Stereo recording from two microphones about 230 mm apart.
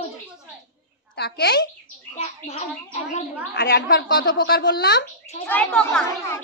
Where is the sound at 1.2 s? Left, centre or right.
Left.